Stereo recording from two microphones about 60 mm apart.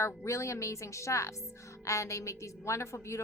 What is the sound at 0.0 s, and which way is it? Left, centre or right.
A woman's voice, left.